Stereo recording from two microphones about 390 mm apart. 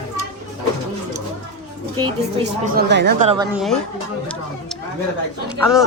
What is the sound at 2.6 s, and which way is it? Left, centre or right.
Speech, right.